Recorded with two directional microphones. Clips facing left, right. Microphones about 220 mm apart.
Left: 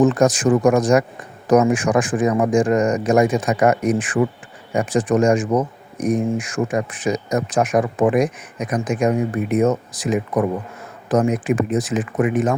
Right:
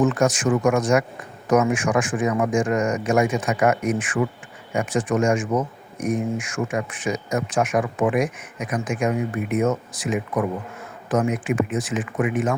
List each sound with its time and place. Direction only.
0.0 s speech: 35° left (ahead or behind)